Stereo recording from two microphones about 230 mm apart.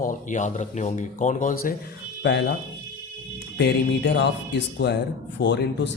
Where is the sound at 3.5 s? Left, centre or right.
Left.